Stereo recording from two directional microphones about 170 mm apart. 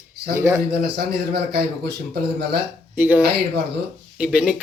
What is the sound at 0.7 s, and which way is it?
Speech, 70° right (ahead or behind).